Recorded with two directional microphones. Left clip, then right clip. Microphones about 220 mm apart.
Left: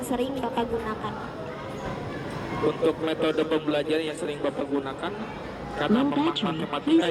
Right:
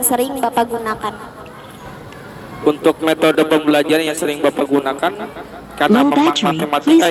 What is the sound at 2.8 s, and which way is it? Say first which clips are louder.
A woman's voice: right 13 dB; 55° right (ahead or behind).